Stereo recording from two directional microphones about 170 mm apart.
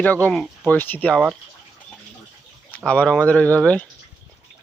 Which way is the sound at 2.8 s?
5° left (ahead or behind).